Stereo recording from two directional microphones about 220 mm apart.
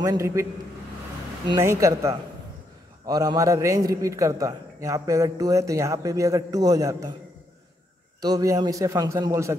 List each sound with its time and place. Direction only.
0.0 s a man's voice: 15° right (ahead or behind)
1.5 s a man's voice: 15° right (ahead or behind)
8.2 s a man's voice: 15° right (ahead or behind)